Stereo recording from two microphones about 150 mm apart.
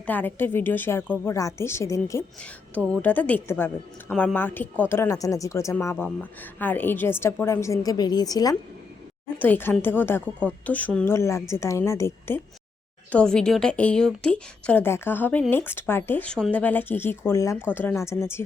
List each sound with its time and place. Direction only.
0.0 s a woman's voice: 10° left (ahead or behind)
2.4 s a woman's voice: 10° left (ahead or behind); by 8.5 s 25° left (ahead or behind)
9.4 s a woman's voice: 10° left (ahead or behind)
13.1 s a woman's voice: 5° left (ahead or behind)